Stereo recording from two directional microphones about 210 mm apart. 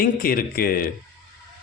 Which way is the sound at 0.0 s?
45° left (ahead or behind).